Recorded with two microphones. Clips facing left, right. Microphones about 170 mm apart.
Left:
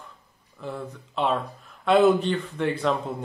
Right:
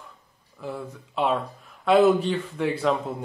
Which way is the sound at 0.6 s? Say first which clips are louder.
Even; 5° right (ahead or behind).